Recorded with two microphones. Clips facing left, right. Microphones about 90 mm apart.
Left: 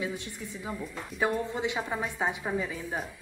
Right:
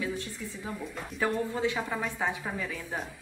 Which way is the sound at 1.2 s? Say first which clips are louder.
Even; 20° left (ahead or behind).